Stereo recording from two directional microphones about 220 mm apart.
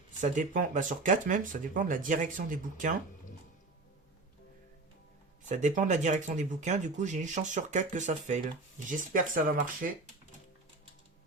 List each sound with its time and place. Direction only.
0.2 s speech: 35° right (ahead or behind)
5.5 s speech: 35° right (ahead or behind)